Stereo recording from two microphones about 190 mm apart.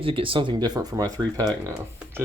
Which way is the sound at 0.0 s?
30° right (ahead or behind).